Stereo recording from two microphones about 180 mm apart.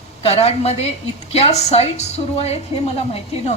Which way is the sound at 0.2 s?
35° left (ahead or behind).